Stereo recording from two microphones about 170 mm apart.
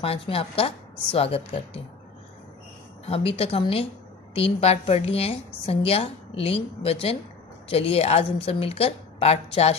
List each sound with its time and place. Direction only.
0.0 s a woman's voice: 35° left (ahead or behind)
3.1 s a woman's voice: 35° left (ahead or behind)